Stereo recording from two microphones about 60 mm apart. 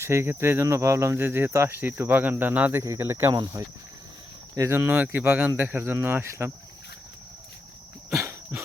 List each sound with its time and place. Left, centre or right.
0.0 s cricket: right
2.8 s speech: right
4.6 s speech: right
5.2 s cricket: right
8.1 s a sound: right